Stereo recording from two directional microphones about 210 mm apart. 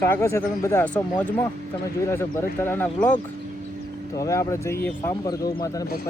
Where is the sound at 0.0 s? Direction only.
15° left (ahead or behind).